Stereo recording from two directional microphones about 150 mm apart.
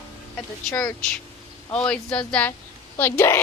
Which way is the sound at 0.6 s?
10° left (ahead or behind).